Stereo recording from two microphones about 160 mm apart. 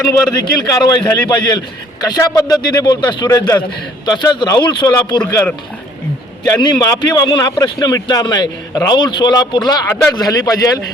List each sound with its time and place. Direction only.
0.1 s a man's voice: 25° left (ahead or behind)
6.4 s a man's voice: 25° left (ahead or behind)